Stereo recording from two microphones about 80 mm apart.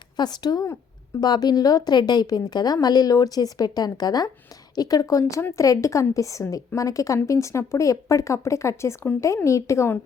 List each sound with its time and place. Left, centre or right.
0.2 s a woman's voice: left